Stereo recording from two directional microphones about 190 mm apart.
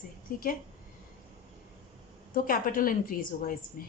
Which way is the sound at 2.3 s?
50° left (ahead or behind).